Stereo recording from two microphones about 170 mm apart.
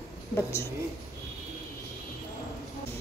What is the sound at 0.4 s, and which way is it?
Speech, 15° left (ahead or behind).